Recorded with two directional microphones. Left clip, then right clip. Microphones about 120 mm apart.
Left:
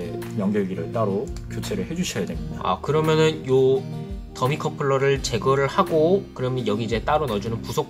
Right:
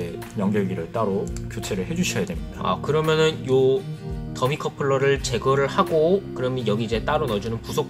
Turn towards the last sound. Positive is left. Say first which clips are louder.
# even
turn(degrees=25)  # may be behind; listen again after turning